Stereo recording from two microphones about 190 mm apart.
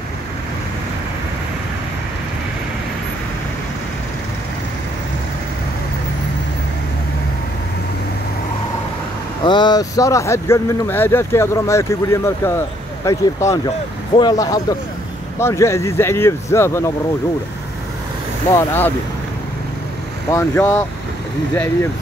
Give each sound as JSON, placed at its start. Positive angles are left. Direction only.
{"t": 9.4, "sound": "speech", "side_deg": 25}
{"t": 18.5, "sound": "speech", "side_deg": 10}
{"t": 20.2, "sound": "speech", "side_deg": 15}